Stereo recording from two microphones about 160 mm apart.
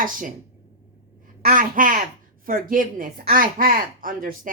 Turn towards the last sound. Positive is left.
turn(degrees=-60)  # may be behind; listen again after turning